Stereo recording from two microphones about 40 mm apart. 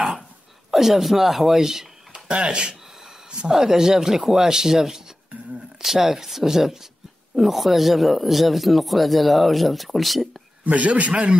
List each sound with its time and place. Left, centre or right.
0.7 s speech: centre
2.2 s speech: right; by 10.2 s centre
10.6 s a man's voice: right